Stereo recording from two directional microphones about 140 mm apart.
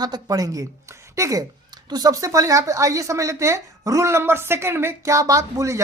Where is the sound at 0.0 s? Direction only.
25° right (ahead or behind).